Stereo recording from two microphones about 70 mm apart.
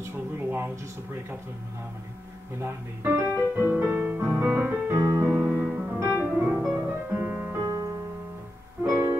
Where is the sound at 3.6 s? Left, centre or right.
Right.